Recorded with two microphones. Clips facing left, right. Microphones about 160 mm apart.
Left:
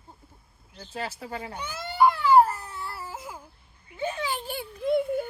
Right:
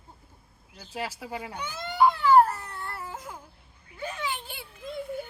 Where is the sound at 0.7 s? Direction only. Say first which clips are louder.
Even; 10° right (ahead or behind).